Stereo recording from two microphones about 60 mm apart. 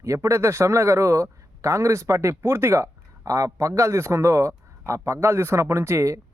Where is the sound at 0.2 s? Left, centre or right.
Right.